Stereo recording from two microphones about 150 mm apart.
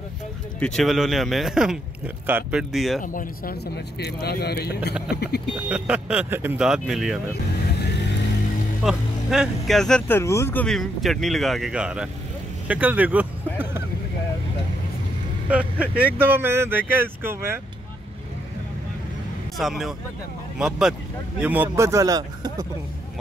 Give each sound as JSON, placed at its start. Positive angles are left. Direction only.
{"t": 0.6, "sound": "speech", "side_deg": 5}
{"t": 2.7, "sound": "speech", "side_deg": 0}
{"t": 3.0, "sound": "speech", "side_deg": 65}
{"t": 5.7, "sound": "speech", "side_deg": -5}
{"t": 8.8, "sound": "speech", "side_deg": -5}
{"t": 15.5, "sound": "speech", "side_deg": -10}
{"t": 19.6, "sound": "speech", "side_deg": 0}